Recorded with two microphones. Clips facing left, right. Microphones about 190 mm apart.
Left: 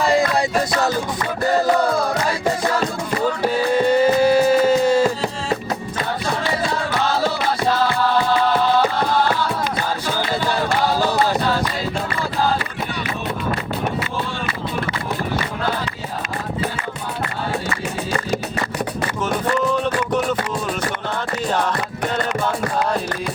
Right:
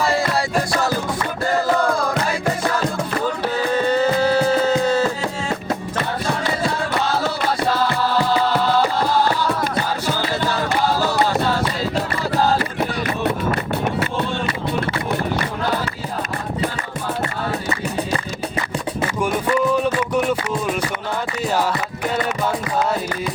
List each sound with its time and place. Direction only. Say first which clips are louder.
0.0 s music: left 2 dB; 15° left (ahead or behind)
3.4 s music: left 3 dB; 10° left (ahead or behind)
19.2 s a sound: right 1 dB; 10° right (ahead or behind)
21.5 s music: right 1 dB; 5° right (ahead or behind)